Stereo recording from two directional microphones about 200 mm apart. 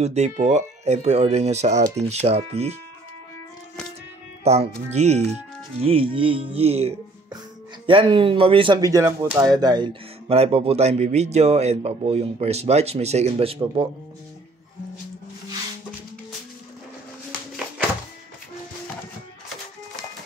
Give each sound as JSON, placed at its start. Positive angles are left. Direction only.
{"t": 0.0, "sound": "speech", "side_deg": -35}
{"t": 4.5, "sound": "speech", "side_deg": -35}